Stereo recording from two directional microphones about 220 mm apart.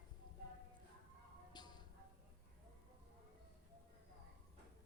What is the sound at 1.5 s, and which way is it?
Music, 20° left (ahead or behind).